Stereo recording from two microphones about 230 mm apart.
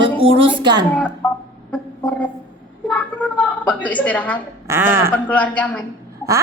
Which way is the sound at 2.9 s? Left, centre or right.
Centre.